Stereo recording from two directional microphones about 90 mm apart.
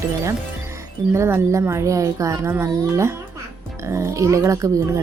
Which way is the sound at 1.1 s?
30° right (ahead or behind).